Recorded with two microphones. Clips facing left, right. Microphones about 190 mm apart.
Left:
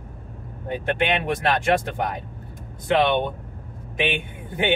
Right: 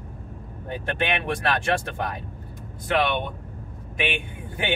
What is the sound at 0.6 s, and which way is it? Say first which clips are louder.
Speech: left 4 dB; 20° left (ahead or behind).